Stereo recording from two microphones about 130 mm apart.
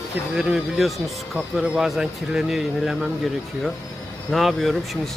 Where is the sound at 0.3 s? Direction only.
5° right (ahead or behind).